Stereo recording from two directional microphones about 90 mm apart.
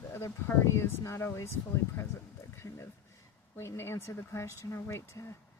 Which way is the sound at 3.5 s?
30° left (ahead or behind).